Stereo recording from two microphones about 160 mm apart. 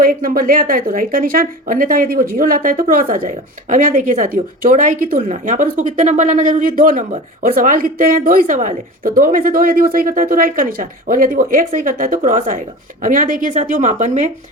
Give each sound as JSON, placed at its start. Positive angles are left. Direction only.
{"t": 0.0, "sound": "speech", "side_deg": -60}